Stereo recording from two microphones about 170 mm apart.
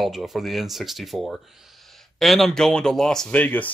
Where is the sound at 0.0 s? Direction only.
Centre (ahead or behind).